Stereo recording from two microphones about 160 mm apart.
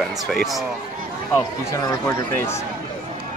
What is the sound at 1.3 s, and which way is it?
Speech, 20° left (ahead or behind).